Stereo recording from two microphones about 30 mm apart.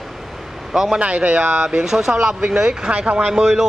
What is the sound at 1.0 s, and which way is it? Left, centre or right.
Speech, right.